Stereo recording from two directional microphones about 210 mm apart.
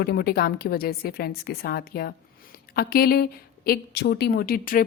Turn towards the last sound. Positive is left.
turn(degrees=40)  # may be behind; listen again after turning